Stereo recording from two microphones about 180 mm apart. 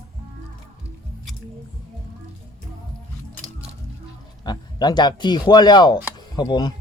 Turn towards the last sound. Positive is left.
turn(degrees=25)  # may be behind; listen again after turning